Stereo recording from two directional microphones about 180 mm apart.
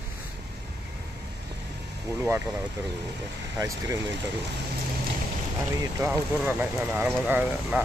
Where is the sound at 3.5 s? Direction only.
15° right (ahead or behind).